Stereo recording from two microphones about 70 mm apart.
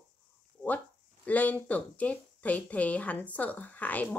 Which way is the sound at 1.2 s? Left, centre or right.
Left.